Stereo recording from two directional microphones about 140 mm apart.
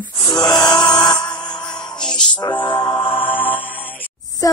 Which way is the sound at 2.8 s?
5° left (ahead or behind).